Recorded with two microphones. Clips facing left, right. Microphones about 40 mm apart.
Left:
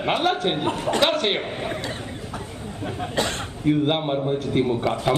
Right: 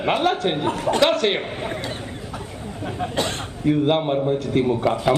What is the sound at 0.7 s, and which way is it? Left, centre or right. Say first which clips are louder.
Speech: right 2 dB; right.